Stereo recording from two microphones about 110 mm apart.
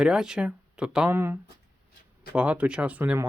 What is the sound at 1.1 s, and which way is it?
Speech, 20° right (ahead or behind).